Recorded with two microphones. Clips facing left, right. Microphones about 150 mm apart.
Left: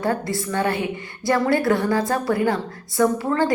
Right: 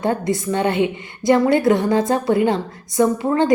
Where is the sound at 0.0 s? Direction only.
20° right (ahead or behind).